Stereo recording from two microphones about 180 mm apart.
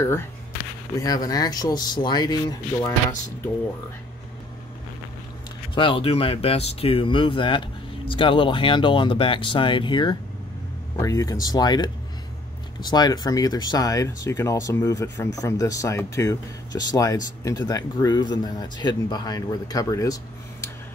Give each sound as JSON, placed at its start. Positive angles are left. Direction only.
{"t": 0.9, "sound": "speech", "side_deg": 20}
{"t": 5.8, "sound": "speech", "side_deg": 30}